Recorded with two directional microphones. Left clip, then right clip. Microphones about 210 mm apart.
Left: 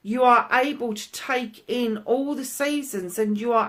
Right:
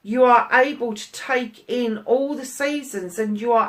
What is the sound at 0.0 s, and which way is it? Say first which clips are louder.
A woman's voice: right 3 dB; 45° left (ahead or behind).